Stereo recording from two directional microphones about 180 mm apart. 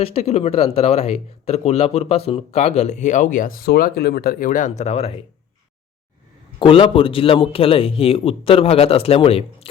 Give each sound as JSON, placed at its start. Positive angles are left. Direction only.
{"t": 0.0, "sound": "speech", "side_deg": 35}
{"t": 6.6, "sound": "speech", "side_deg": 30}